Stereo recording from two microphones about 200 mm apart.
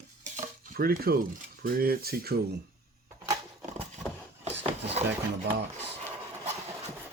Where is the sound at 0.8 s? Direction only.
50° right (ahead or behind).